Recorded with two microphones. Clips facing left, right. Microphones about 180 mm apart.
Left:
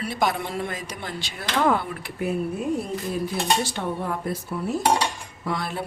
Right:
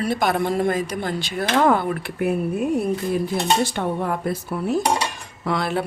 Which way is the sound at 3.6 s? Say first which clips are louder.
Right 5 dB; 60° right (ahead or behind).